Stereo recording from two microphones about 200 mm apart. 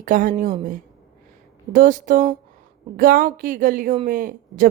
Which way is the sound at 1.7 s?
40° right (ahead or behind).